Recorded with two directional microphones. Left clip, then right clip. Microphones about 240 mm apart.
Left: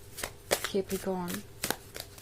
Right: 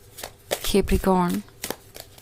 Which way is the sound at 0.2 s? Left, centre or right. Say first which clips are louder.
Right 2 dB; centre.